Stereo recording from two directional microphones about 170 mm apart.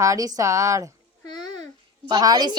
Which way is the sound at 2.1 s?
20° right (ahead or behind).